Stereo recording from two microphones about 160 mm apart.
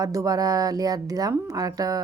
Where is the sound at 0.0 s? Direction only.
20° right (ahead or behind).